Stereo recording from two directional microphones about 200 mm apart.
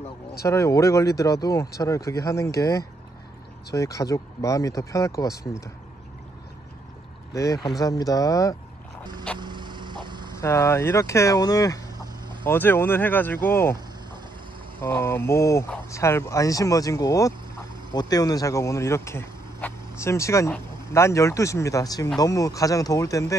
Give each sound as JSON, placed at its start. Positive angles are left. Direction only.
{"t": 0.4, "sound": "speech", "side_deg": 15}
{"t": 7.3, "sound": "speech", "side_deg": 15}
{"t": 9.4, "sound": "a sound", "side_deg": -20}
{"t": 10.3, "sound": "speech", "side_deg": 15}
{"t": 14.8, "sound": "speech", "side_deg": 10}